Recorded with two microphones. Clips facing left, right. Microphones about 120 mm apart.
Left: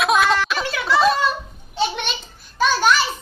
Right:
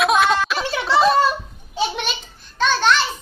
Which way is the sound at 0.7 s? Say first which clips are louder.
Right 1 dB; 25° right (ahead or behind).